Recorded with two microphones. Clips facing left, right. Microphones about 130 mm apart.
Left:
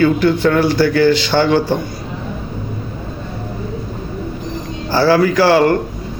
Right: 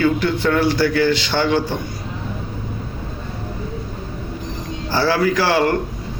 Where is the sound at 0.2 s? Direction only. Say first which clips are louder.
Left 6 dB; 25° right (ahead or behind).